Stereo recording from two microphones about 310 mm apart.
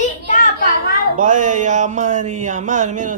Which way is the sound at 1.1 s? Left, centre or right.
Right.